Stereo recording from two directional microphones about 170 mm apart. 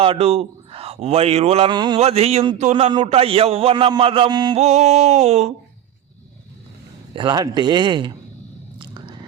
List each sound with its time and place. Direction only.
0.0 s a man's voice: 35° right (ahead or behind)
2.0 s a man's voice: 35° right (ahead or behind)
4.5 s a man's voice: 40° right (ahead or behind)
7.2 s speech: 25° right (ahead or behind)
8.8 s a sound: 30° right (ahead or behind)